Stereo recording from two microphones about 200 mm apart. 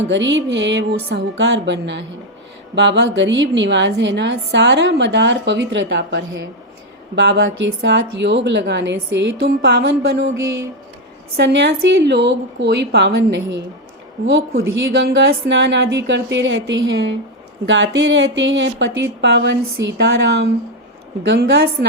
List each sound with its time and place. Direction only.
0.1 s a woman's voice: 65° right (ahead or behind)
11.3 s a woman's voice: 60° right (ahead or behind)